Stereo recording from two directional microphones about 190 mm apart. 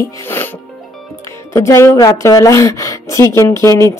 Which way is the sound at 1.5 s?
15° left (ahead or behind).